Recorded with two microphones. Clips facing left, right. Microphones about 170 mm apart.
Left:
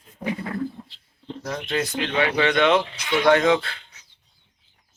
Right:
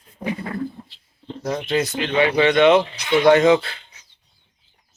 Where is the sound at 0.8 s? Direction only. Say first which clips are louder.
Right 1 dB; centre (ahead or behind).